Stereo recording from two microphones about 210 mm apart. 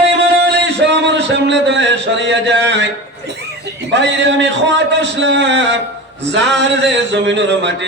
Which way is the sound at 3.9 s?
55° right (ahead or behind).